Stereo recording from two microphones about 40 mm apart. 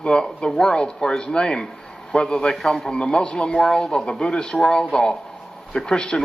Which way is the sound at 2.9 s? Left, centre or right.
Left.